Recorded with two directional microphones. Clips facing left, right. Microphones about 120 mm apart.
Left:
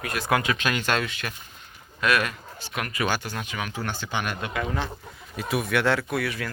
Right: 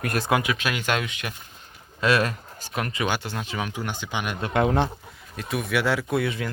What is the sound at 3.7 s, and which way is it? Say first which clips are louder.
Speech: even; 15° right (ahead or behind).